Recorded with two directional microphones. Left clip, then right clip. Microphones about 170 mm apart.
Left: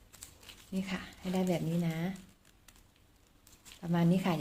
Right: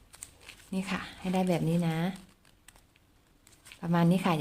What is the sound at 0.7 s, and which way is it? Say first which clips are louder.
Speech: right 5 dB; 25° right (ahead or behind).